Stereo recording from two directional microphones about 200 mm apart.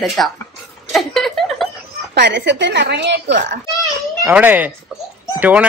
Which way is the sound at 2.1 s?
60° right (ahead or behind).